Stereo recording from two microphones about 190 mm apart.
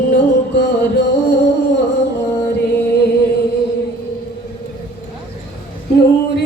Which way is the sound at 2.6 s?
60° left (ahead or behind).